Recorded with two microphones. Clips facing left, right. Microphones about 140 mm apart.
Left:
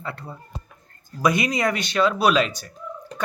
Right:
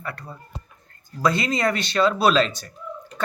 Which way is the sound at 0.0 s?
20° left (ahead or behind).